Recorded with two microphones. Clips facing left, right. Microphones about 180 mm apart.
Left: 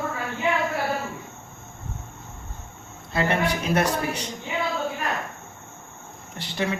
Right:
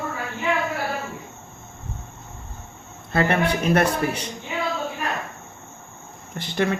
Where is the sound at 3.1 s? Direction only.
60° right (ahead or behind).